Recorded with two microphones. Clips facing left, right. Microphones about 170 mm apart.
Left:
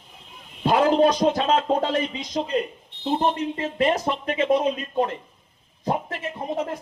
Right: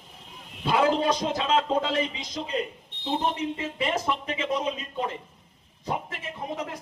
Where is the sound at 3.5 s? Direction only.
50° left (ahead or behind).